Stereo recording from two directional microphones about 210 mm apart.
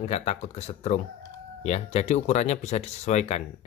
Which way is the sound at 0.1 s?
30° left (ahead or behind).